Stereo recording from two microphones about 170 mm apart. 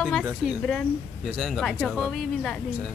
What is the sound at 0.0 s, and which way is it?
Speech, centre (ahead or behind).